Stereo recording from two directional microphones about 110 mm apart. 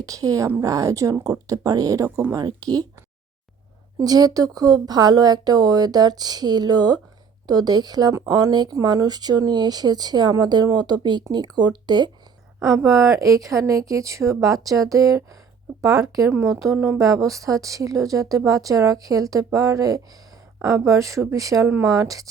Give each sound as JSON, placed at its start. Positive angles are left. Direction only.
{"t": 0.0, "sound": "speech", "side_deg": -30}
{"t": 3.9, "sound": "speech", "side_deg": -35}
{"t": 12.5, "sound": "a woman's voice", "side_deg": -25}
{"t": 16.7, "sound": "speech", "side_deg": -15}
{"t": 17.0, "sound": "speech", "side_deg": -30}